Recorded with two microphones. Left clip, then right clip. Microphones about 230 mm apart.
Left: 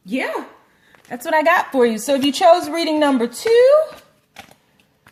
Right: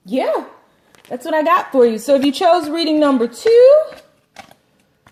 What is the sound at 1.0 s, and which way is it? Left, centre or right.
A woman's voice, left.